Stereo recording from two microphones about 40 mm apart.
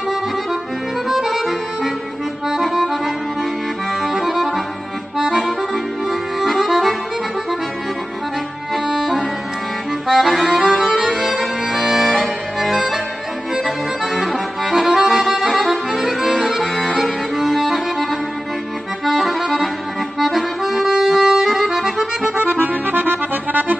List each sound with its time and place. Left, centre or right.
1.0 s music: centre
2.5 s accordion: centre
4.0 s accordion: centre
10.0 s accordion: centre
17.0 s music: centre
19.0 s accordion: centre
22.4 s accordion: right